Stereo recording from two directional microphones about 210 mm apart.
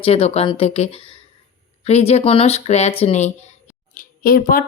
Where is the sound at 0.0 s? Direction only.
30° left (ahead or behind).